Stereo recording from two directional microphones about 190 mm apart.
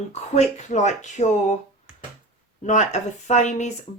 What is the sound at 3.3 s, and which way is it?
Speech, 35° left (ahead or behind).